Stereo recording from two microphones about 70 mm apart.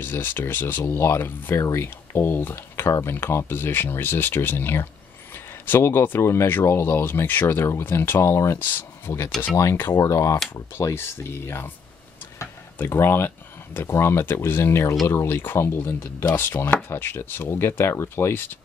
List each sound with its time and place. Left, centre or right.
0.0 s speech: left
8.5 s speech: left
12.7 s speech: left